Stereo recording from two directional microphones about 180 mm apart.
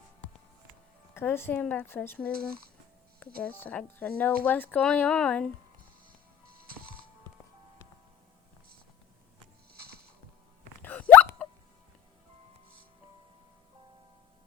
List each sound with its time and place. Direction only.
1.1 s speech: 10° left (ahead or behind)
6.6 s music: 55° right (ahead or behind)
10.8 s hiccup: 10° left (ahead or behind)